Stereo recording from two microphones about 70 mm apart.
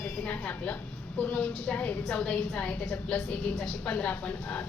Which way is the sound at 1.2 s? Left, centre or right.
Centre.